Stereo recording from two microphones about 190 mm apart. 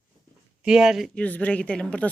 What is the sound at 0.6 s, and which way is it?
Speech, 5° right (ahead or behind).